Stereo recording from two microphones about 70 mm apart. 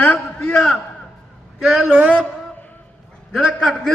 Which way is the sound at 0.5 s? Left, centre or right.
Centre.